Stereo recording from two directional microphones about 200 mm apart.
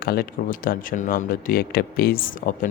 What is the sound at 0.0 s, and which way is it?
Speech, 50° left (ahead or behind).